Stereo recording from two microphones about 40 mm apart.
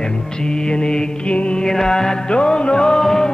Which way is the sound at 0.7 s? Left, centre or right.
Left.